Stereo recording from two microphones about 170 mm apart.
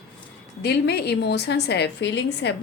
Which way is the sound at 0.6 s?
70° left (ahead or behind).